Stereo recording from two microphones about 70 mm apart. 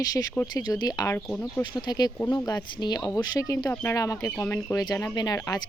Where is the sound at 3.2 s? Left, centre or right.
Left.